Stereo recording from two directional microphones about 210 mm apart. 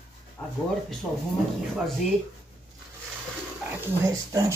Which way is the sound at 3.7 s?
15° right (ahead or behind).